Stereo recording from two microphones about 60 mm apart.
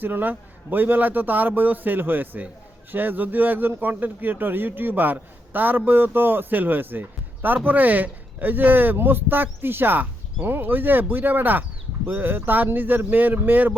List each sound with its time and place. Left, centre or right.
0.0 s a man's voice: right